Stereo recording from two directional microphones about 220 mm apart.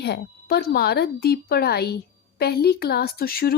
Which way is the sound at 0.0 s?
45° left (ahead or behind).